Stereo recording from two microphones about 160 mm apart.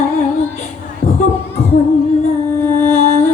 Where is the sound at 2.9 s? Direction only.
45° left (ahead or behind).